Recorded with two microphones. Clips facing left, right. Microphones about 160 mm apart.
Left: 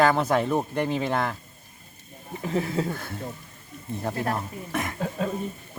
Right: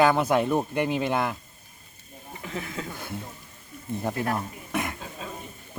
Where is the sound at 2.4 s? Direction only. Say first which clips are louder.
Left 8 dB; 35° left (ahead or behind).